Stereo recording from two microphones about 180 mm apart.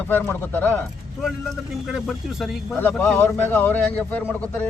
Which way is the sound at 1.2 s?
Centre (ahead or behind).